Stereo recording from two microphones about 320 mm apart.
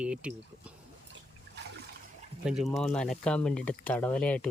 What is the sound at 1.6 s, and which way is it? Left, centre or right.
Water, right.